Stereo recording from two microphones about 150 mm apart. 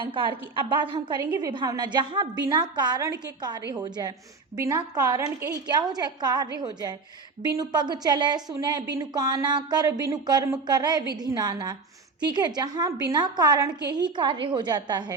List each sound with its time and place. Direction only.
0.0 s a woman's voice: 35° right (ahead or behind)
1.2 s a woman's voice: 20° right (ahead or behind)